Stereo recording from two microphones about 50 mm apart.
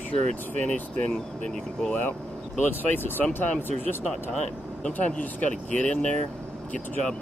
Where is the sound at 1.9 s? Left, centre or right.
Left.